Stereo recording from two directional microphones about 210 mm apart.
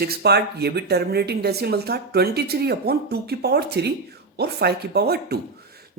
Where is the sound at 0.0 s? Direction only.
50° right (ahead or behind).